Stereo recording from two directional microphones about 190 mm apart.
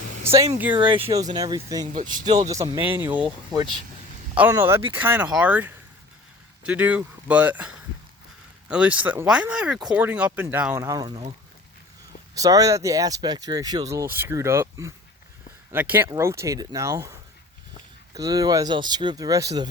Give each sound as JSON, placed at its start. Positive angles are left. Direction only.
{"t": 1.1, "sound": "speech", "side_deg": -20}
{"t": 3.5, "sound": "speech", "side_deg": -20}
{"t": 12.3, "sound": "speech", "side_deg": -20}